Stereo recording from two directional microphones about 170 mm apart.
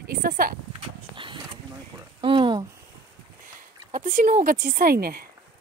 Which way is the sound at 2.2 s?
30° right (ahead or behind).